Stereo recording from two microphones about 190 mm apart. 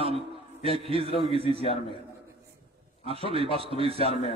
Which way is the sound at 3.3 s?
30° right (ahead or behind).